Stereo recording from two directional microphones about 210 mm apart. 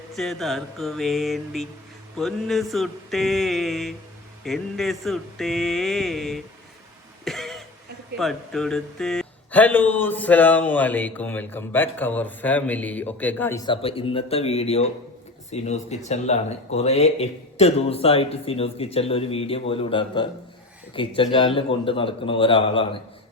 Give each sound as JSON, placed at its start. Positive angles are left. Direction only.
{"t": 0.1, "sound": "a sound", "side_deg": 0}
{"t": 7.3, "sound": "throat clearing", "side_deg": 0}
{"t": 8.2, "sound": "speech", "side_deg": 0}